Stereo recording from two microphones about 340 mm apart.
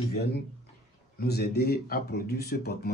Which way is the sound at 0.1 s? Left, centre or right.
Left.